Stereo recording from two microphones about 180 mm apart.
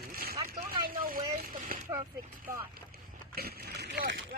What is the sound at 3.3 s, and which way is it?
Speech, 60° right (ahead or behind).